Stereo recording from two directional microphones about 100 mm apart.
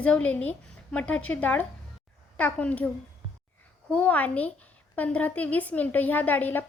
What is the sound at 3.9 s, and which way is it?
A woman's voice, 15° left (ahead or behind).